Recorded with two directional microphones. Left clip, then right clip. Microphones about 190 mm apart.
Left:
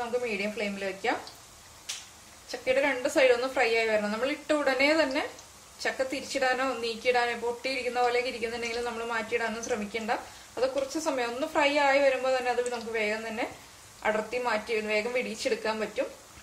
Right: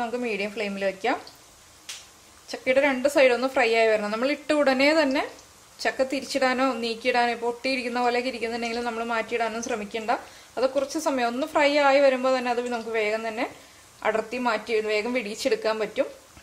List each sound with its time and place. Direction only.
0.4 s a woman's voice: 50° right (ahead or behind)
2.4 s a woman's voice: 50° right (ahead or behind)